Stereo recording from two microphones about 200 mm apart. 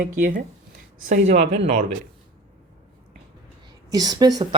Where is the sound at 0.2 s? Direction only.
40° right (ahead or behind).